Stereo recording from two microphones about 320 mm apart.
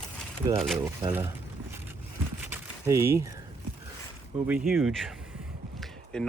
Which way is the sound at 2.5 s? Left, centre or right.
Centre.